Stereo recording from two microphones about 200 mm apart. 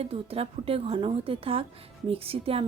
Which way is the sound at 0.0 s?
30° right (ahead or behind).